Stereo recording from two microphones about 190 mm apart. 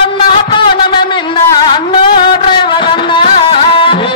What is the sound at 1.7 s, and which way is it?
Music, 25° left (ahead or behind).